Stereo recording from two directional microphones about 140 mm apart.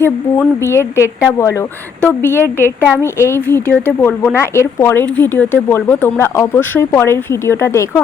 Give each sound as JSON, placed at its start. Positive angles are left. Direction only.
{"t": 0.0, "sound": "speech", "side_deg": 15}